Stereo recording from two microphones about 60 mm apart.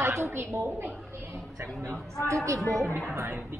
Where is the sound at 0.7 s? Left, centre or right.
Right.